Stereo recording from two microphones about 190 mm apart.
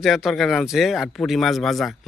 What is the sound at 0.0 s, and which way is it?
Speech, centre (ahead or behind).